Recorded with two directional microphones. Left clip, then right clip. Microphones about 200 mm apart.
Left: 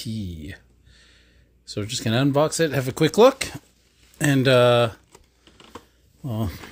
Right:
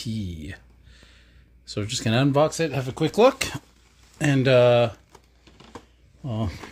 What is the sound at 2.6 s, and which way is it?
Speech, 35° left (ahead or behind).